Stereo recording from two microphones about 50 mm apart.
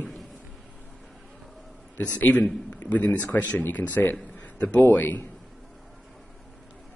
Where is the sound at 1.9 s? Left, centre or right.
Left.